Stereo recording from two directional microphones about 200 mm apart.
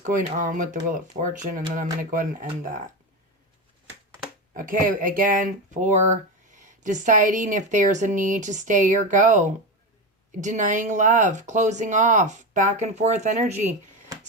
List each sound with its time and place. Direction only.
0.0 s speech: 40° right (ahead or behind)
4.5 s speech: 40° right (ahead or behind)